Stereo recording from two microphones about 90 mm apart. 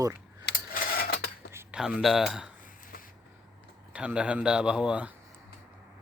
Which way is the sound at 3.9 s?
15° right (ahead or behind).